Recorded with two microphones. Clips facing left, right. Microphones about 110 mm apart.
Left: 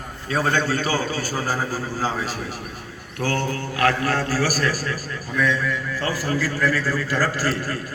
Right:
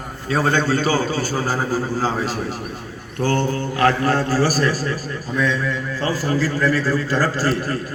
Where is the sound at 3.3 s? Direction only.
25° right (ahead or behind).